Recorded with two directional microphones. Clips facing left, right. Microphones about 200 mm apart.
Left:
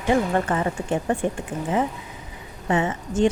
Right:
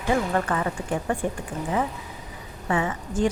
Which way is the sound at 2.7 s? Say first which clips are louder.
Left 3 dB; 25° left (ahead or behind).